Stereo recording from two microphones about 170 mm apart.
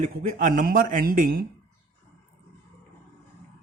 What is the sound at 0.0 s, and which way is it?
A man's voice, 50° right (ahead or behind).